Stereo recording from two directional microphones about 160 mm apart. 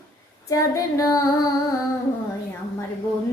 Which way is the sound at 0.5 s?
20° left (ahead or behind).